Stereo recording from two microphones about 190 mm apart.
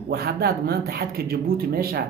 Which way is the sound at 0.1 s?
55° right (ahead or behind).